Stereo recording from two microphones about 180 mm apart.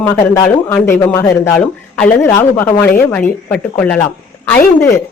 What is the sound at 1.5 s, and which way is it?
Speech, 5° left (ahead or behind).